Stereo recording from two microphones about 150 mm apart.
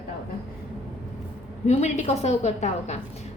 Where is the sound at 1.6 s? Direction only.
50° left (ahead or behind).